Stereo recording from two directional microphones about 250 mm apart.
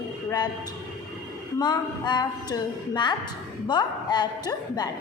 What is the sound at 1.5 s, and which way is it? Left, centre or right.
A woman's voice, centre.